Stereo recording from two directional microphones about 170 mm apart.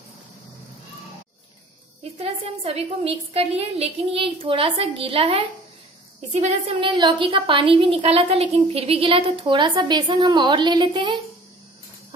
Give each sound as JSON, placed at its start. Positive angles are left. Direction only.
{"t": 2.1, "sound": "a woman's voice", "side_deg": -35}
{"t": 6.8, "sound": "a woman's voice", "side_deg": -30}